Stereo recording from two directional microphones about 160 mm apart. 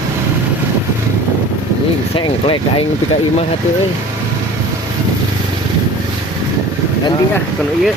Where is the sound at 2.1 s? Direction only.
30° left (ahead or behind).